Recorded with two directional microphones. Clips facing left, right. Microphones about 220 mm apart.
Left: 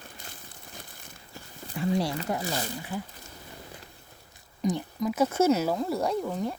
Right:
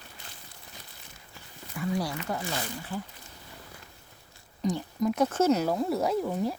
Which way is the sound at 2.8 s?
10° left (ahead or behind).